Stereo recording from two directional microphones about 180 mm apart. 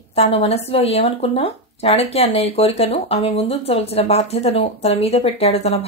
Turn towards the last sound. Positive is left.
turn(degrees=35)  # may be behind; listen again after turning